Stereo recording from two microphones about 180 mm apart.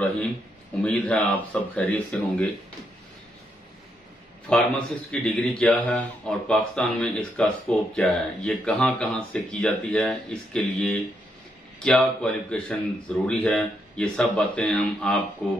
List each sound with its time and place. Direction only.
0.8 s speech: 5° left (ahead or behind)
4.5 s a man's voice: 5° left (ahead or behind)